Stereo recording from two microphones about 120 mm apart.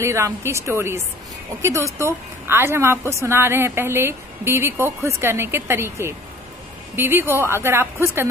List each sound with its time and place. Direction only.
0.0 s a woman's voice: 20° right (ahead or behind)